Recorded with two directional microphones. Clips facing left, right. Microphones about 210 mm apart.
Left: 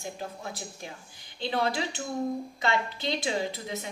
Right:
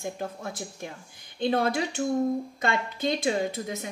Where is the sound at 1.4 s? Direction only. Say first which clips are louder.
Right 4 dB; 50° right (ahead or behind).